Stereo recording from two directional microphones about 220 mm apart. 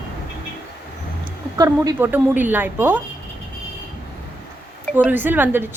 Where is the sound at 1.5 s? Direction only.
15° right (ahead or behind).